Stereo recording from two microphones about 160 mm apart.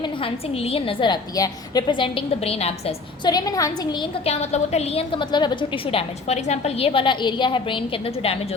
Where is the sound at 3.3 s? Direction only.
25° left (ahead or behind).